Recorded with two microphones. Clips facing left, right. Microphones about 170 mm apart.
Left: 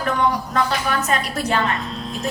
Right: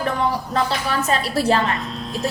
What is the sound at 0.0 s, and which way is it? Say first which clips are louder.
A woman's voice: left 1 dB; 30° right (ahead or behind).